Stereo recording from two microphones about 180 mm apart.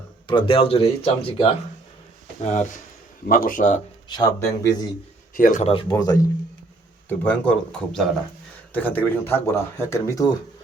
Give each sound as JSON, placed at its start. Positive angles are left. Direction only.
{"t": 0.3, "sound": "speech", "side_deg": 30}
{"t": 3.2, "sound": "a man's voice", "side_deg": 50}
{"t": 4.1, "sound": "speech", "side_deg": 20}
{"t": 5.3, "sound": "a man's voice", "side_deg": 45}
{"t": 5.9, "sound": "speech", "side_deg": 20}
{"t": 7.1, "sound": "speech", "side_deg": 5}